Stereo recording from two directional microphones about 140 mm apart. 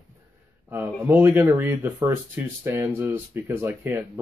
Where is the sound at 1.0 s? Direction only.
15° right (ahead or behind).